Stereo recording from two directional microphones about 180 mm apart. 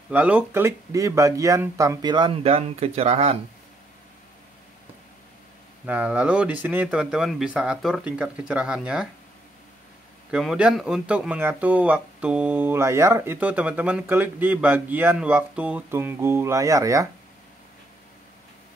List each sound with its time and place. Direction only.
0.1 s speech: 10° right (ahead or behind); by 3.3 s 35° right (ahead or behind)
5.9 s speech: 10° right (ahead or behind)
10.3 s speech: centre (ahead or behind)